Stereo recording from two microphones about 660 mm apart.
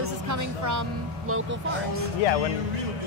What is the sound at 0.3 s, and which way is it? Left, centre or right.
Speech, right.